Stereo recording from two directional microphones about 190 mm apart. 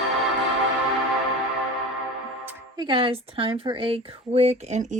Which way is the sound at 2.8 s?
25° right (ahead or behind).